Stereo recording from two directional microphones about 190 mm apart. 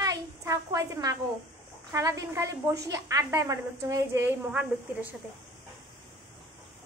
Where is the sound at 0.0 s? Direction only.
20° right (ahead or behind).